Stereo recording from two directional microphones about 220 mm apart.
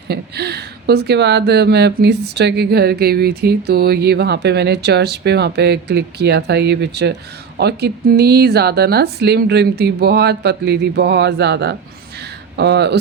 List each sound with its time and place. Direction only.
0.1 s speech: 50° right (ahead or behind)